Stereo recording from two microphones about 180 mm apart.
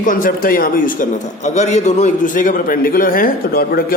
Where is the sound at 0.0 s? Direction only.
50° left (ahead or behind).